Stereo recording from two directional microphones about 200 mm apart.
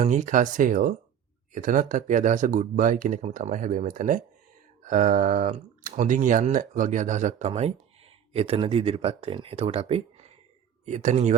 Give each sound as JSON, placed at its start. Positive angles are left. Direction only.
{"t": 0.0, "sound": "speech", "side_deg": -40}